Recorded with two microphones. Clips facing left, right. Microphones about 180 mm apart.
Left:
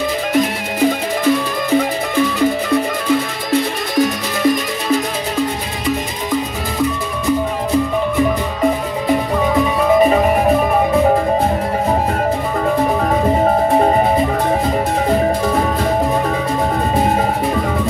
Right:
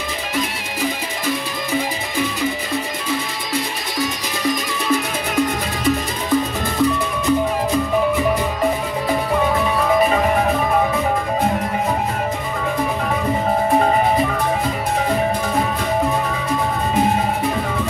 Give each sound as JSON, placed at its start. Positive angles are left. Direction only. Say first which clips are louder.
{"t": 3.9, "sound": "music", "louder": "left 8 dB", "side_deg": 55}